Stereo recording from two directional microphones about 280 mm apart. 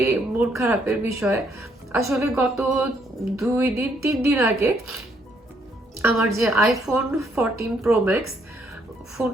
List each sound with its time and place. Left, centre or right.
0.0 s a woman's voice: centre
6.0 s a woman's voice: centre